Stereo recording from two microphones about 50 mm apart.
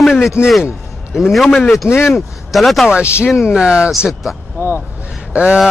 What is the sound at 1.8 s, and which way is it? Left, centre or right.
Speech, left.